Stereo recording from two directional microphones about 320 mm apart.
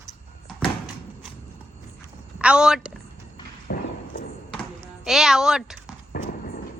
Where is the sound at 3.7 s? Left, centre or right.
Left.